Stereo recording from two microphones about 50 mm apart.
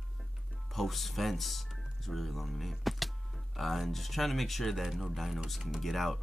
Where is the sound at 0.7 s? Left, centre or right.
Centre.